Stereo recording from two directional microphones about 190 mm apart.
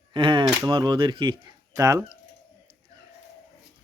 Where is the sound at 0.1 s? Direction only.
25° right (ahead or behind).